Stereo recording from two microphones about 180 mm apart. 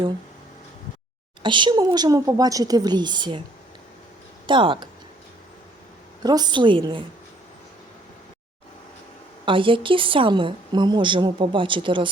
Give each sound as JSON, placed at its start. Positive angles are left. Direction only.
{"t": 1.4, "sound": "a woman's voice", "side_deg": -25}
{"t": 4.4, "sound": "a woman's voice", "side_deg": -25}
{"t": 6.2, "sound": "a woman's voice", "side_deg": -20}
{"t": 9.5, "sound": "a woman's voice", "side_deg": -30}